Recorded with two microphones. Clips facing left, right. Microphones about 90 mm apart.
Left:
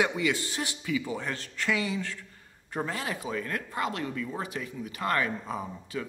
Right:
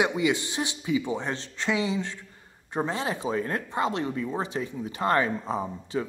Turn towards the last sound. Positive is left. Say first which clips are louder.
# right 5 dB
turn(degrees=-30)  # may be behind; listen again after turning